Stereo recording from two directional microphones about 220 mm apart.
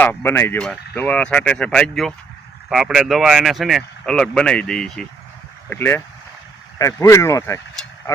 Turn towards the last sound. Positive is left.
turn(degrees=10)  # may be behind; listen again after turning